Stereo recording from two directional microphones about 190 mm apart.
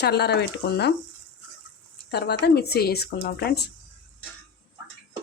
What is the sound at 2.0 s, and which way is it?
Speech, 60° left (ahead or behind).